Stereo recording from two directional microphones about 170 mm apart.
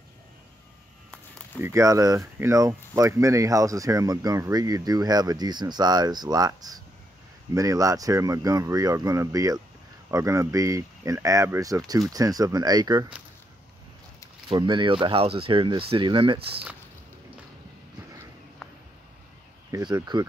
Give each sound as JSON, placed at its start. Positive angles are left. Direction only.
{"t": 1.6, "sound": "speech", "side_deg": -20}
{"t": 14.5, "sound": "speech", "side_deg": -30}
{"t": 18.6, "sound": "a sound", "side_deg": 0}
{"t": 19.7, "sound": "speech", "side_deg": -25}